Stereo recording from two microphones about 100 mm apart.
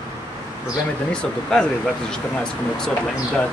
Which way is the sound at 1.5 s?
10° left (ahead or behind).